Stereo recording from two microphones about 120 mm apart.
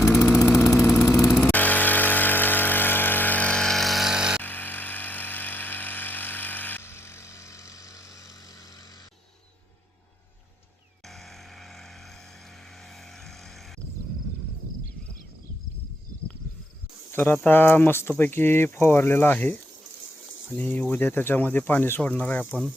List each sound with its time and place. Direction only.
0.3 s vehicle: 20° left (ahead or behind)
1.4 s vehicle: 15° left (ahead or behind); by 4.4 s 5° right (ahead or behind)
4.4 s vehicle: 15° left (ahead or behind)
17.1 s speech: 20° left (ahead or behind)
20.6 s speech: 10° left (ahead or behind)